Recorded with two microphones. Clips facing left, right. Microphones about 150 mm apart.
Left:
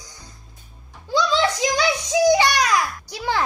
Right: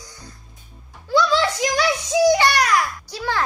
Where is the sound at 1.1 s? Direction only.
20° left (ahead or behind).